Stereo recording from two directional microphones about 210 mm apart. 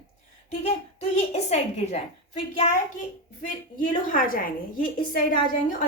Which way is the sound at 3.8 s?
40° left (ahead or behind).